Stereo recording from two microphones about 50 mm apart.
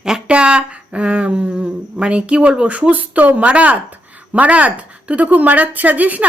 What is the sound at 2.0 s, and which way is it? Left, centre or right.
A woman's voice, right.